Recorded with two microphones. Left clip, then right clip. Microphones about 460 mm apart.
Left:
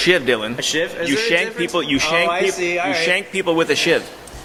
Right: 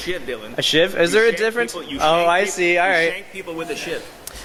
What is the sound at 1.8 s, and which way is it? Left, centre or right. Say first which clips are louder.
Speech: left 3 dB; left.